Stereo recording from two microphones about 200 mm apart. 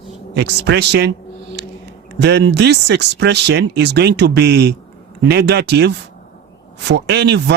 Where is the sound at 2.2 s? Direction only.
60° right (ahead or behind).